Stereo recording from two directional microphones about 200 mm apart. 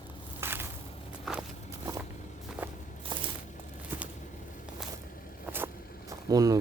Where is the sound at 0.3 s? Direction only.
10° right (ahead or behind).